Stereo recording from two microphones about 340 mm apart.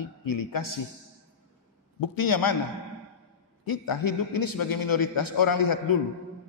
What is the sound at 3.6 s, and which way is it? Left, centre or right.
A man's voice, left.